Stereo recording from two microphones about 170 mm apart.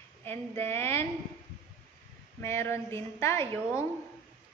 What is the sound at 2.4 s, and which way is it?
A woman's voice, 15° left (ahead or behind).